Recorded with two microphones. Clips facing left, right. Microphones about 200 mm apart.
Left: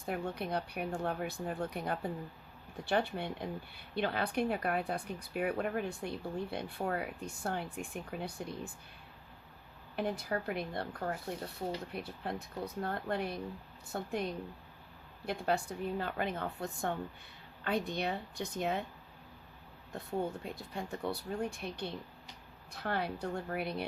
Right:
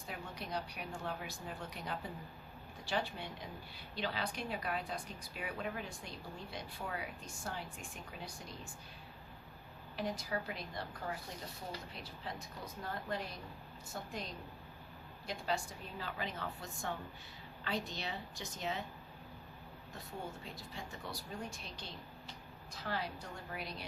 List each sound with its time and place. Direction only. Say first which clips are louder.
0.0 s speech: left 9 dB; 55° left (ahead or behind)
9.9 s speech: left 4 dB; 60° left (ahead or behind)
20.4 s speech: left 7 dB; 55° left (ahead or behind)